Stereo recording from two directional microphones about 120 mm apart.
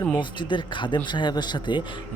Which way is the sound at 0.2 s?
40° left (ahead or behind).